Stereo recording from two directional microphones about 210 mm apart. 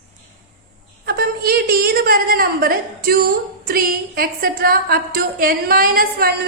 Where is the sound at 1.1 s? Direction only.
45° right (ahead or behind).